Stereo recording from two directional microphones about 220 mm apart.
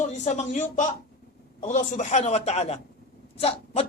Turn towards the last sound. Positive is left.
turn(degrees=25)  # may be behind; listen again after turning